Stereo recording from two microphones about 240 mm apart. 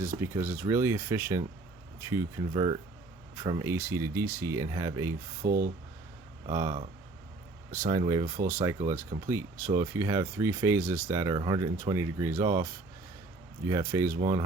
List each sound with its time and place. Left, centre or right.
0.0 s speech: centre
5.4 s speech: right
6.5 s speech: centre